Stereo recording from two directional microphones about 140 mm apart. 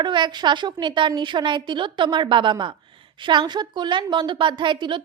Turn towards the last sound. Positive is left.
turn(degrees=-35)  # may be behind; listen again after turning